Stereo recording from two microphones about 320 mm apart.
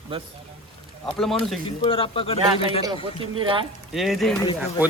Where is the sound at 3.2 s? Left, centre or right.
Centre.